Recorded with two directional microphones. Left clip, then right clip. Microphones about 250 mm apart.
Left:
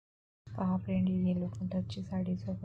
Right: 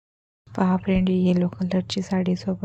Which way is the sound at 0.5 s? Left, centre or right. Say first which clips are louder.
Right 13 dB; right.